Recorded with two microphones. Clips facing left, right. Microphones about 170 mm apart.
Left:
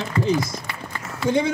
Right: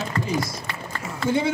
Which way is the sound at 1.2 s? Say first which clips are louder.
Left 2 dB; 20° left (ahead or behind).